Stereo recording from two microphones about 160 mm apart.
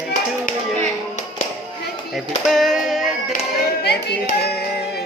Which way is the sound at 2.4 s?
Centre (ahead or behind).